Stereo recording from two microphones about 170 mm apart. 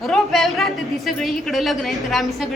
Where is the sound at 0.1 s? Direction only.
Centre (ahead or behind).